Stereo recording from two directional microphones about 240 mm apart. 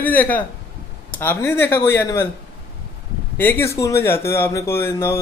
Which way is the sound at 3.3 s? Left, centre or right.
Centre.